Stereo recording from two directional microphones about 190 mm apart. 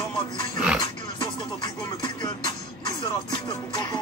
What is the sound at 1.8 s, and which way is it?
Music, 20° left (ahead or behind).